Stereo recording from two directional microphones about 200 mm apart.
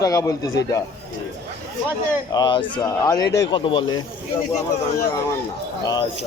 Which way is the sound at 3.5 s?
25° left (ahead or behind).